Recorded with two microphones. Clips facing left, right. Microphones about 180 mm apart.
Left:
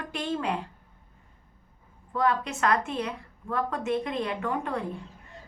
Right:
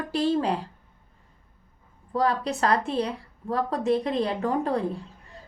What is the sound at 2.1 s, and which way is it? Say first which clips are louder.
Speech: right 2 dB; 35° right (ahead or behind).